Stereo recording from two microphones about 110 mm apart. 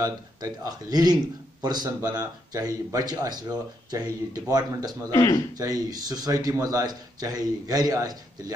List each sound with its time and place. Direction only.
0.0 s a man's voice: 35° right (ahead or behind)